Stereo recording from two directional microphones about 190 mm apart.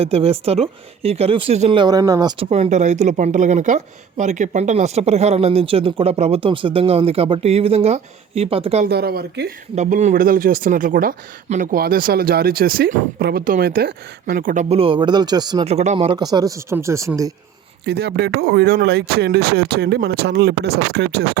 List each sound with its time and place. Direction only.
0.0 s a woman's voice: 30° right (ahead or behind)
2.5 s a woman's voice: 35° right (ahead or behind)
8.8 s speech: 55° right (ahead or behind)
9.7 s speech: 40° right (ahead or behind); by 15.6 s 20° right (ahead or behind)
15.6 s speech: 35° right (ahead or behind); by 17.3 s 15° right (ahead or behind)
17.8 s speech: 60° right (ahead or behind)